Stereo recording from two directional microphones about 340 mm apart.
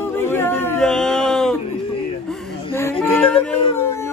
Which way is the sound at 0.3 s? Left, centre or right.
Centre.